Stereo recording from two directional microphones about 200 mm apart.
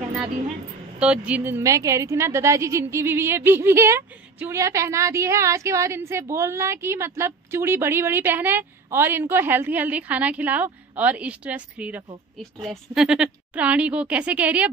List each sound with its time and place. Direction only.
0.9 s a woman's voice: 5° right (ahead or behind)